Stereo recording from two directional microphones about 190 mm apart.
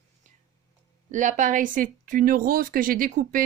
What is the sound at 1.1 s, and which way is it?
Speech, 40° right (ahead or behind).